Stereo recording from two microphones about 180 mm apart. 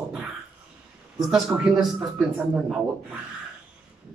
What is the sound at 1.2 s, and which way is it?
Speech, centre (ahead or behind).